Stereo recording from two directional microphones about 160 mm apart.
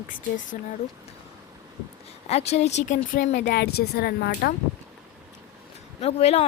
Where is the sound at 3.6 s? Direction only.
85° left.